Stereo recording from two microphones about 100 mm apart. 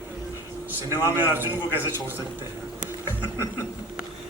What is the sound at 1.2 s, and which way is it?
Speech, 20° right (ahead or behind).